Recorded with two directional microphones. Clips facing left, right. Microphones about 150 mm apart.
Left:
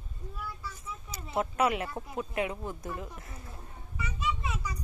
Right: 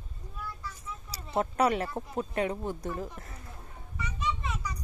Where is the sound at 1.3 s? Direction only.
35° right (ahead or behind).